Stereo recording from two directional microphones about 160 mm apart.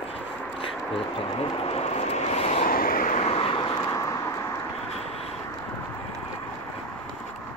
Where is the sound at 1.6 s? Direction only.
40° left (ahead or behind).